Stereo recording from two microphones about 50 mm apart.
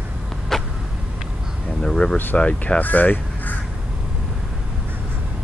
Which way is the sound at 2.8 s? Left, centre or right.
Left.